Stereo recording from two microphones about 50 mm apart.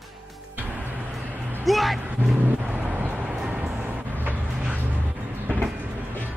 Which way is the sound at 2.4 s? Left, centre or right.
Right.